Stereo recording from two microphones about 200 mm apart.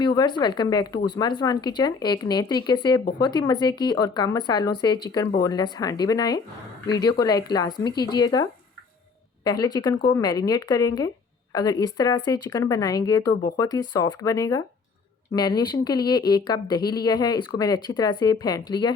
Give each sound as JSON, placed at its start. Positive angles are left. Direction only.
{"t": 0.0, "sound": "speech", "side_deg": 20}